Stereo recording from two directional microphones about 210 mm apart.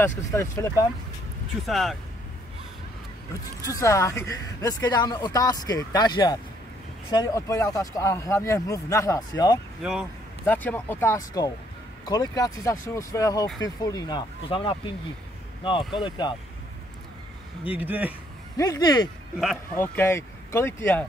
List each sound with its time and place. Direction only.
0.3 s speech: 15° left (ahead or behind)
1.7 s speech: centre (ahead or behind)
3.6 s speech: 15° left (ahead or behind)
10.4 s speech: 10° left (ahead or behind)
17.6 s speech: 5° right (ahead or behind)
18.6 s speech: 15° left (ahead or behind)